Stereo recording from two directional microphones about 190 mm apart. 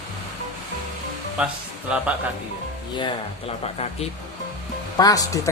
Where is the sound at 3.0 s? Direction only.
25° left (ahead or behind).